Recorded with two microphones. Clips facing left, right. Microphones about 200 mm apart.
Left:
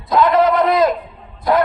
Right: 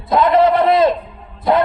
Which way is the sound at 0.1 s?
25° right (ahead or behind).